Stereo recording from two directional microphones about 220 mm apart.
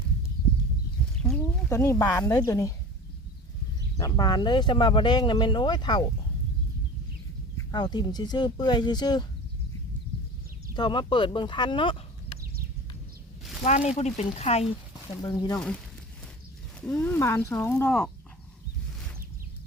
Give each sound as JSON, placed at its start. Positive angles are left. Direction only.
{"t": 1.2, "sound": "speech", "side_deg": 5}
{"t": 3.9, "sound": "speech", "side_deg": 20}
{"t": 7.5, "sound": "speech", "side_deg": 20}
{"t": 10.8, "sound": "speech", "side_deg": 20}
{"t": 13.7, "sound": "speech", "side_deg": 30}
{"t": 15.2, "sound": "speech", "side_deg": 20}
{"t": 16.8, "sound": "speech", "side_deg": 5}